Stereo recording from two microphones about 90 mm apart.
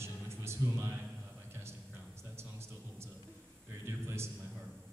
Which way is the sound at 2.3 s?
30° right (ahead or behind).